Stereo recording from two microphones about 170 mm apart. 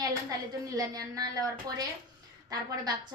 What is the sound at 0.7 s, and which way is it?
A woman's voice, 20° right (ahead or behind).